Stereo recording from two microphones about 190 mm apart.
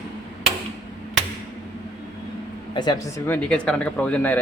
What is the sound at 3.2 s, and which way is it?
Speech, 5° left (ahead or behind).